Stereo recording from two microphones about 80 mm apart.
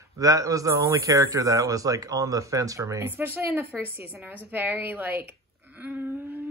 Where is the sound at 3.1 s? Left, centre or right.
Right.